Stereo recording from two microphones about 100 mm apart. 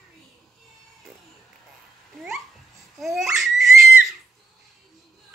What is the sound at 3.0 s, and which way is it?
Babbling, 5° right (ahead or behind).